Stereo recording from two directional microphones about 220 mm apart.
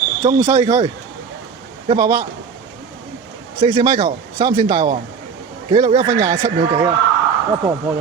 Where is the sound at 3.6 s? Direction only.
20° right (ahead or behind).